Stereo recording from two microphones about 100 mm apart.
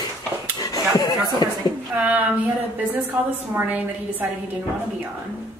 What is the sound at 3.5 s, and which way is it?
Speech, 15° right (ahead or behind).